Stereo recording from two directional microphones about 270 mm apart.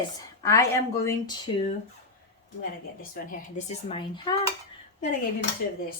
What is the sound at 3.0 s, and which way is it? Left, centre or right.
Speech, left.